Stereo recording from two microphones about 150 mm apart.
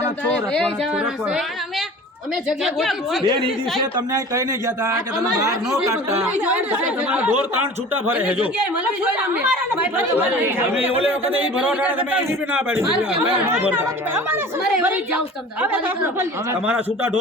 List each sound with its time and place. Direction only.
0.3 s speech: 5° left (ahead or behind)
2.6 s a woman's voice: centre (ahead or behind)
4.1 s speech: 20° right (ahead or behind)